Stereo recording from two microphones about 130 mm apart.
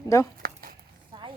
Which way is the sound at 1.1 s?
30° right (ahead or behind).